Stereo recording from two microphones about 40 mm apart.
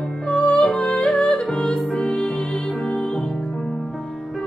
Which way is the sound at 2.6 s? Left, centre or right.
Centre.